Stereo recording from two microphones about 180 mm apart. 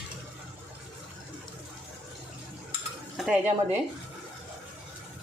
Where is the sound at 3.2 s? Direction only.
10° right (ahead or behind).